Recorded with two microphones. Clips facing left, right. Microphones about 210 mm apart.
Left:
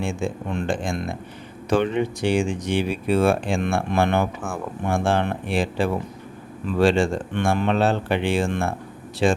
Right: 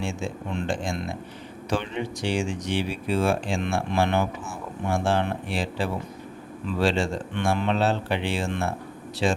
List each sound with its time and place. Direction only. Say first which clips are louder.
0.0 s speech: left 4 dB; 55° left (ahead or behind)